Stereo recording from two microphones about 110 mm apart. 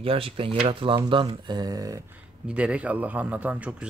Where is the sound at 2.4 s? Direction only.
10° right (ahead or behind).